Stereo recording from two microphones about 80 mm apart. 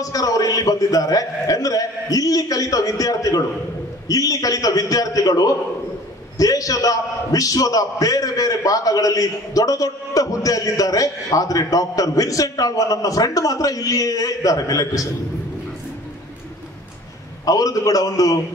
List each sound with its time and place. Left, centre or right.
0.0 s a man's voice: left
17.5 s a man's voice: left